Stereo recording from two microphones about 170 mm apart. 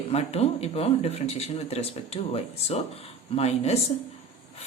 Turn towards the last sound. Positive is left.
turn(degrees=40)  # may be behind; listen again after turning